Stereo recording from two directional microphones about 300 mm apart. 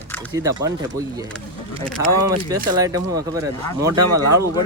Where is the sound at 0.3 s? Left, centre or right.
Centre.